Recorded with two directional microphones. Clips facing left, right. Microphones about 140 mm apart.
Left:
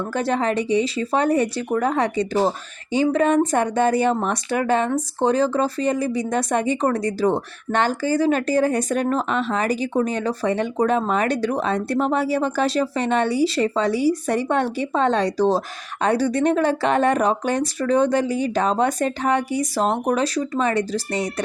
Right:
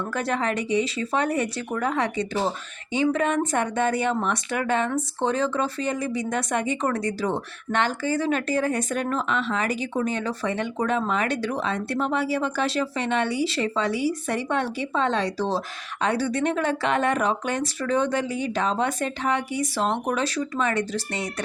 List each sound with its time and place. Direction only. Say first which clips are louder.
0.1 s speech: left 5 dB; 35° left (ahead or behind)